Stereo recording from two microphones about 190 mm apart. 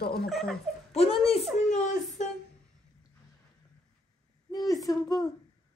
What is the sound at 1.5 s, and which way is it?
Speech, 35° left (ahead or behind).